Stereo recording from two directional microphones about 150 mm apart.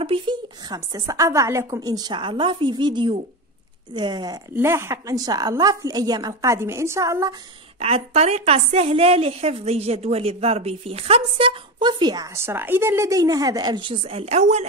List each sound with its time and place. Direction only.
0.0 s a woman's voice: 35° right (ahead or behind)
4.6 s a woman's voice: 15° right (ahead or behind)
7.8 s a woman's voice: 45° right (ahead or behind)